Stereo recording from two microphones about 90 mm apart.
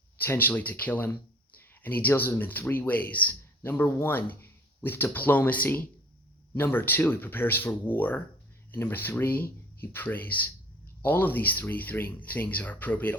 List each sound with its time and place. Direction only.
0.2 s speech: 20° left (ahead or behind)